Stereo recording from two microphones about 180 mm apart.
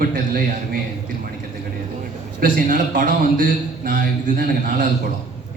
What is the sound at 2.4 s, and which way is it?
A man's voice, 50° right (ahead or behind).